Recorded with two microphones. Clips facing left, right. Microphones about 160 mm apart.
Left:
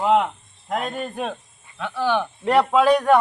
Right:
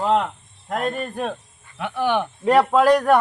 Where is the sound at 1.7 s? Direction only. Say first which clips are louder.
Right 1 dB; 15° right (ahead or behind).